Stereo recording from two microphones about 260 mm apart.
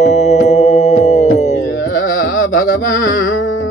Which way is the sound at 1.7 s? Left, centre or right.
Left.